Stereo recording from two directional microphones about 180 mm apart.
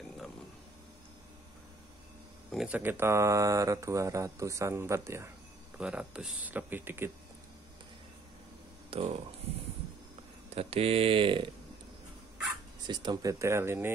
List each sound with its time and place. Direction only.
2.5 s speech: 5° right (ahead or behind)
8.9 s speech: 35° right (ahead or behind)
10.5 s speech: 35° right (ahead or behind)
12.8 s speech: 25° right (ahead or behind)